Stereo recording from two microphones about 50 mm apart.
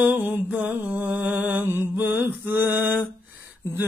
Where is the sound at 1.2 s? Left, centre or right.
Right.